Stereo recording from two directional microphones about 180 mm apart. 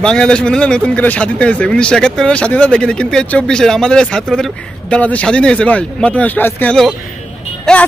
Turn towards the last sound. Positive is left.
turn(degrees=5)  # may be behind; listen again after turning